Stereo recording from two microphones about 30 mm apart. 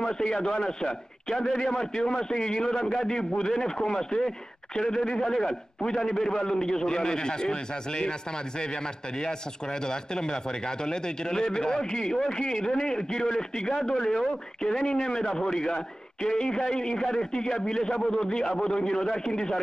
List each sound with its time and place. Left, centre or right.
0.0 s a man's voice: left
9.8 s a man's voice: left